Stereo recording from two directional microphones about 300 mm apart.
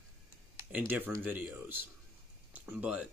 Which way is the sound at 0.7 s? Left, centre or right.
Centre.